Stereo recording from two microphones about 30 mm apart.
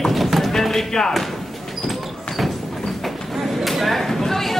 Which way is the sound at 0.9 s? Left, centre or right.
Centre.